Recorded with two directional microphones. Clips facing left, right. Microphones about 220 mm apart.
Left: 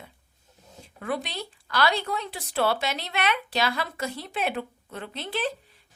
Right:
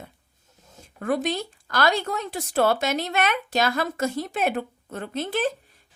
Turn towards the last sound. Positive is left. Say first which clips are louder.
# right 5 dB
turn(degrees=-45)  # may be behind; listen again after turning